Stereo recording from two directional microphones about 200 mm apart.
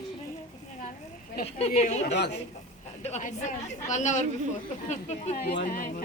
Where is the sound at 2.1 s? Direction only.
55° left (ahead or behind).